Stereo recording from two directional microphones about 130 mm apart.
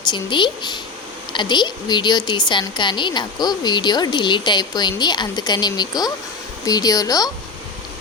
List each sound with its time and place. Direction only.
0.1 s a woman's voice: 35° left (ahead or behind)